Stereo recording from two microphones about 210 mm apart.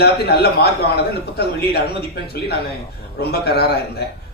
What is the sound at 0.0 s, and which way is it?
Speech, 50° left (ahead or behind).